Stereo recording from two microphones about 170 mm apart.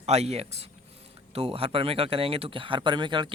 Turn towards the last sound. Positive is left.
turn(degrees=-25)  # may be behind; listen again after turning